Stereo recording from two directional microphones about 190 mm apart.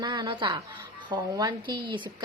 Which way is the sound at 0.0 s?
25° right (ahead or behind).